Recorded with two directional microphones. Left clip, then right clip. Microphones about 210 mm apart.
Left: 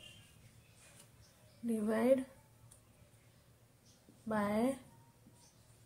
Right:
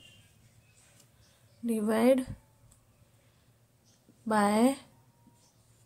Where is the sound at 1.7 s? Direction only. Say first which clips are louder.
Right 6 dB; 45° right (ahead or behind).